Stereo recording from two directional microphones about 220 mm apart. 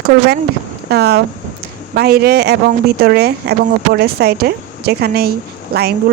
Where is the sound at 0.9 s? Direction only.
45° right (ahead or behind).